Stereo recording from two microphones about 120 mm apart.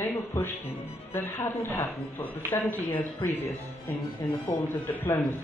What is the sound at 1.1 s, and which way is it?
Speech, 20° left (ahead or behind).